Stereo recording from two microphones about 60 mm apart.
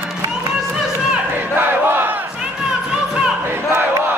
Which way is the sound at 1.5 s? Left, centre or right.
Right.